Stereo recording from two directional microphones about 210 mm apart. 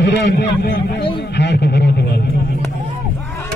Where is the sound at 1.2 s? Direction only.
55° left (ahead or behind).